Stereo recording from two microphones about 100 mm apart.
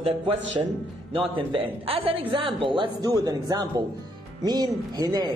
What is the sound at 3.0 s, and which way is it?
Speech, 40° right (ahead or behind).